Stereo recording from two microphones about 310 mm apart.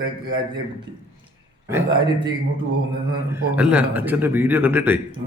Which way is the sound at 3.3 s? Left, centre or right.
Centre.